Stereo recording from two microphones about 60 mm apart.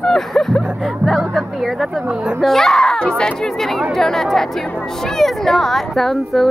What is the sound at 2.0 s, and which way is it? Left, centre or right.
Speech, centre.